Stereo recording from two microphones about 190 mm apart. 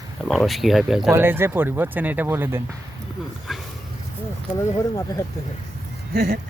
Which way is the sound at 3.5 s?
Centre (ahead or behind).